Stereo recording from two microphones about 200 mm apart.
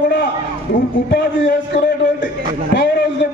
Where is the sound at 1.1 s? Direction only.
55° left (ahead or behind).